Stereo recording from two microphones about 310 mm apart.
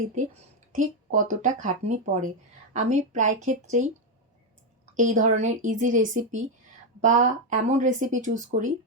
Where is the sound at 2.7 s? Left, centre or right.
Right.